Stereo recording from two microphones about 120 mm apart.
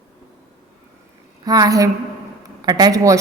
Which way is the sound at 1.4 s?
30° right (ahead or behind).